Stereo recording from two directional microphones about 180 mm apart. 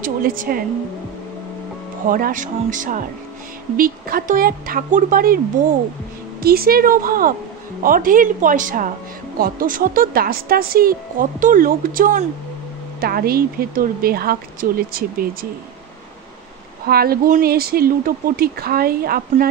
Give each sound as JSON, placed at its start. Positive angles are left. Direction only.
{"t": 0.0, "sound": "a woman's voice", "side_deg": -50}
{"t": 2.0, "sound": "a woman's voice", "side_deg": -50}
{"t": 6.4, "sound": "a woman's voice", "side_deg": -55}
{"t": 16.8, "sound": "speech", "side_deg": -55}